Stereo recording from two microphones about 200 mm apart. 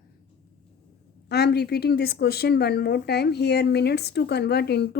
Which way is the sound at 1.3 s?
55° left (ahead or behind).